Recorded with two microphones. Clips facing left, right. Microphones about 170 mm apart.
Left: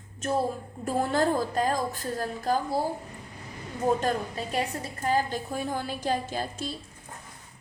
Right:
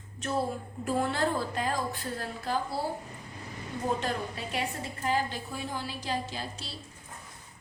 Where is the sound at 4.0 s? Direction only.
40° left (ahead or behind).